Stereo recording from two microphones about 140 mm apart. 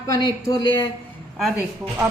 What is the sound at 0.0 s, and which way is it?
Speech, 25° left (ahead or behind).